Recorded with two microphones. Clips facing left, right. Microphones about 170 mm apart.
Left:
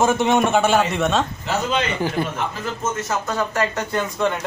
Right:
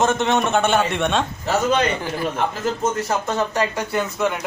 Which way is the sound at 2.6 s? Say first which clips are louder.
Right 4 dB; 35° right (ahead or behind).